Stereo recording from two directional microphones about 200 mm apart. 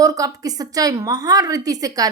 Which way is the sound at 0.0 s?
20° right (ahead or behind).